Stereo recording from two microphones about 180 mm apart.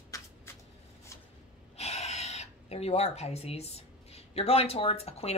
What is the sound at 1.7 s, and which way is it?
Speech, 35° left (ahead or behind).